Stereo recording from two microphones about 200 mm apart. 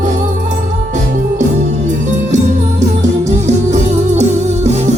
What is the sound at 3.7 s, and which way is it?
Music, 35° right (ahead or behind).